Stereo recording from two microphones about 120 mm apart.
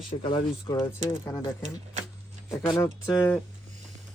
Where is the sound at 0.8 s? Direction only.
20° left (ahead or behind).